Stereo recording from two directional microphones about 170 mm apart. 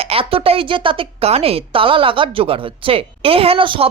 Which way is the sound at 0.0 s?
35° right (ahead or behind).